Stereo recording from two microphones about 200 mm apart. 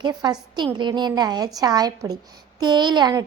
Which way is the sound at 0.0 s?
20° right (ahead or behind).